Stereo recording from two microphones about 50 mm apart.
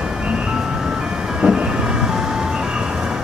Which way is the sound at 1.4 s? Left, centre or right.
Centre.